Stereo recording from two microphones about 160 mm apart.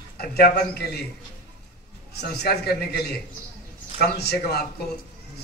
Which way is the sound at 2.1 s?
90° left.